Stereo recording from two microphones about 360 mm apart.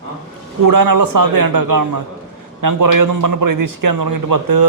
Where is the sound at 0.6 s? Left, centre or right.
Right.